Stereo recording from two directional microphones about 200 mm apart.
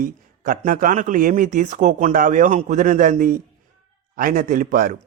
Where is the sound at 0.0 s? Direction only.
45° right (ahead or behind).